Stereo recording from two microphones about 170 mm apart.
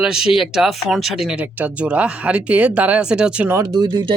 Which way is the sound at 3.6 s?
25° right (ahead or behind).